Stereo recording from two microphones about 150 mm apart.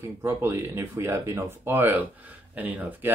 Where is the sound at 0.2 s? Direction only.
15° right (ahead or behind).